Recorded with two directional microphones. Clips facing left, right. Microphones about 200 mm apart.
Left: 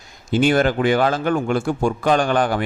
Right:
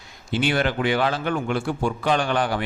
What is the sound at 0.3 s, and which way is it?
A man's voice, 45° left (ahead or behind).